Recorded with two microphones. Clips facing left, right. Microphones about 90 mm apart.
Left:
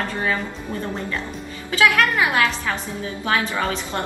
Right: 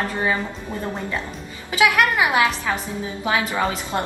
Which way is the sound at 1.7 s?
20° right (ahead or behind).